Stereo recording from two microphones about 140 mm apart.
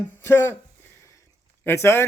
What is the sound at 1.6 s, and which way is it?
Speech, 15° left (ahead or behind).